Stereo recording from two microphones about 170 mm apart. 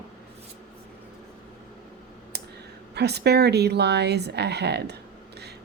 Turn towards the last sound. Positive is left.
turn(degrees=-80)